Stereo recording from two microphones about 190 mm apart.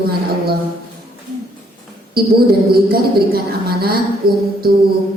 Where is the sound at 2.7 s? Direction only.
55° right (ahead or behind).